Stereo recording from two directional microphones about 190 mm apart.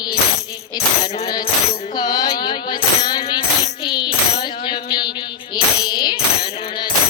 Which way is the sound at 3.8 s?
25° left (ahead or behind).